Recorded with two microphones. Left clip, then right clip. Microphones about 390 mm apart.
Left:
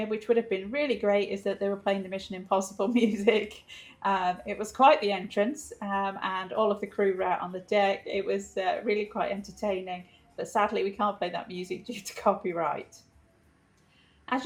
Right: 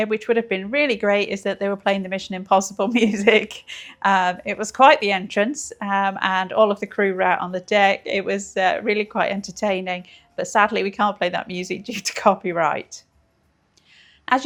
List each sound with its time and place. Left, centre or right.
0.0 s speech: right